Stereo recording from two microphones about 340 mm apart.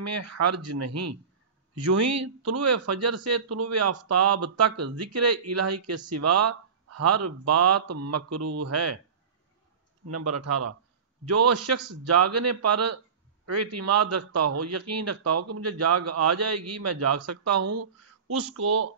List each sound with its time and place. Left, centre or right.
0.0 s speech: right
10.0 s speech: right